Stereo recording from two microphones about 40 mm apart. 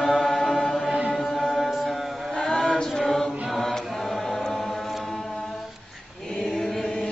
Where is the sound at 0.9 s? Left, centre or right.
Right.